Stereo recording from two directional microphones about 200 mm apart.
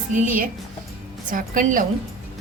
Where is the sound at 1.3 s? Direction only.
40° right (ahead or behind).